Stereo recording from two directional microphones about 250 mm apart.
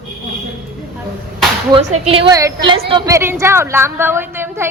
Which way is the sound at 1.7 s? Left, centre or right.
Centre.